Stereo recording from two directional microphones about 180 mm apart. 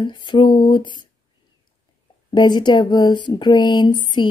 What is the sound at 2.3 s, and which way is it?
Speech, 25° left (ahead or behind).